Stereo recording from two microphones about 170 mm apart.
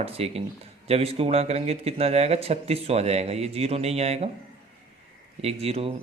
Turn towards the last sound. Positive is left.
turn(degrees=-35)  # may be behind; listen again after turning